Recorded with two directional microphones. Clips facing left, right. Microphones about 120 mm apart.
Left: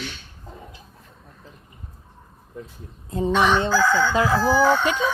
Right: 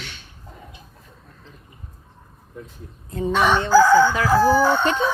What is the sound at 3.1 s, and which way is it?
Speech, 25° left (ahead or behind).